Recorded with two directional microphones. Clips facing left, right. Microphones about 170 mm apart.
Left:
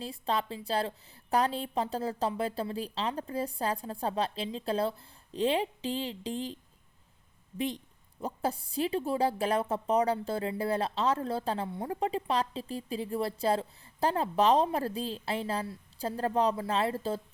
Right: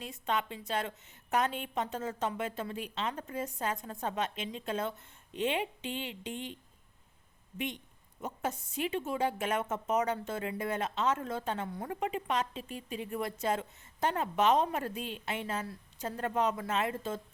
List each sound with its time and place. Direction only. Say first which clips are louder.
0.0 s a woman's voice: left 2 dB; 30° left (ahead or behind)
8.2 s a woman's voice: left 4 dB; 35° left (ahead or behind)